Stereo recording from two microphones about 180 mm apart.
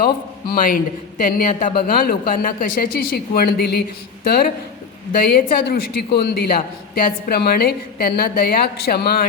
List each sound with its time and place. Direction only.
0.0 s a woman's voice: 55° left (ahead or behind)